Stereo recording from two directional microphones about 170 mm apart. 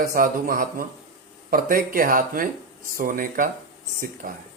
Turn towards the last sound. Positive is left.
turn(degrees=-55)  # may be behind; listen again after turning